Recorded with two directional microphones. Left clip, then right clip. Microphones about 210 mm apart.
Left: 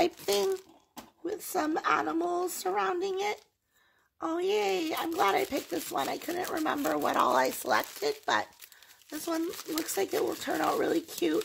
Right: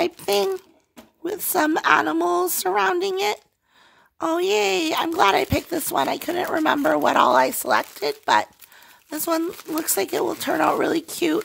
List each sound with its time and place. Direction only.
0.0 s a child's voice: 25° right (ahead or behind)
1.2 s speech: 40° right (ahead or behind)